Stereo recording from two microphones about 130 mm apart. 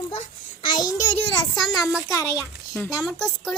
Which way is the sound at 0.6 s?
30° left (ahead or behind).